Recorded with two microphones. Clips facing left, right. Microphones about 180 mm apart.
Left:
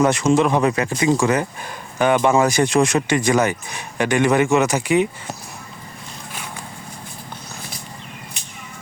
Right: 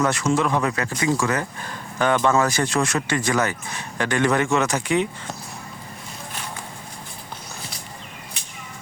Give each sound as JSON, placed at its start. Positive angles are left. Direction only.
{"t": 0.0, "sound": "speech", "side_deg": 20}